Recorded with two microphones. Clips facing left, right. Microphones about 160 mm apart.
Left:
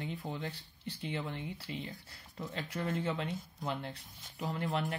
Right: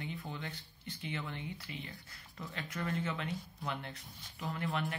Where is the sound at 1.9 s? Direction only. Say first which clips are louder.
Left 3 dB; 20° left (ahead or behind).